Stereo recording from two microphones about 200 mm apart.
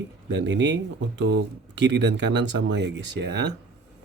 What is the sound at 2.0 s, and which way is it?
Speech, 60° right (ahead or behind).